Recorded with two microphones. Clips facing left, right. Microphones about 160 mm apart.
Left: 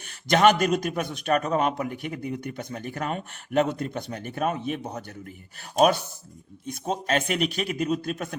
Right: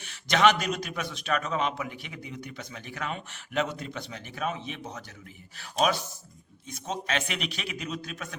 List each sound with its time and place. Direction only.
0.3 s speech: 50° left (ahead or behind)